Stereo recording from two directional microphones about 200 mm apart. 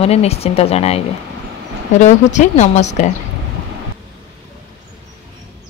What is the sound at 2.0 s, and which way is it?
Speech, 35° left (ahead or behind).